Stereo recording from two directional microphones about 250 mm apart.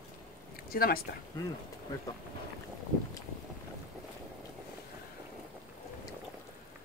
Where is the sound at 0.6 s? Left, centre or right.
Left.